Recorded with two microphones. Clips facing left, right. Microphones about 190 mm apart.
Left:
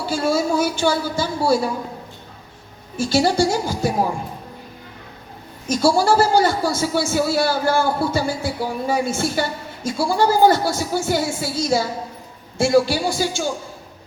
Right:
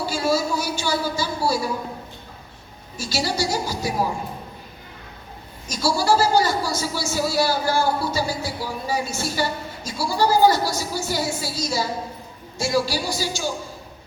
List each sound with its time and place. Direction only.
0.1 s a sound: 55° left (ahead or behind)
3.0 s speech: 55° left (ahead or behind)
5.6 s a man's voice: 55° left (ahead or behind)